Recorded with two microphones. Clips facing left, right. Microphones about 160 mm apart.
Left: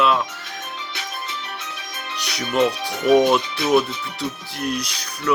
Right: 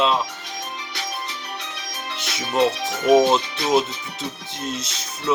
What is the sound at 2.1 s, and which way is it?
Speech, 20° right (ahead or behind).